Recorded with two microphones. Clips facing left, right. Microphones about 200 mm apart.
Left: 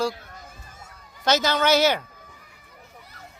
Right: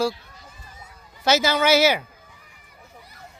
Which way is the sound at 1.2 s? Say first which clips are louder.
Right 2 dB; 10° right (ahead or behind).